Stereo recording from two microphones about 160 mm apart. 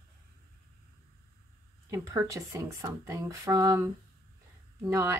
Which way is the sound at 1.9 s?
20° right (ahead or behind).